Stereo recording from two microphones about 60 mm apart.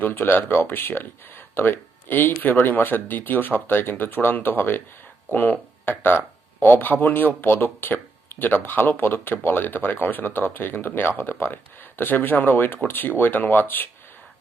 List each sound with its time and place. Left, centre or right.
0.0 s speech: left